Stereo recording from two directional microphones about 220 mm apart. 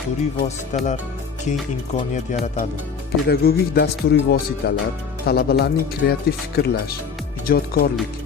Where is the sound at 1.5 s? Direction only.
35° left (ahead or behind).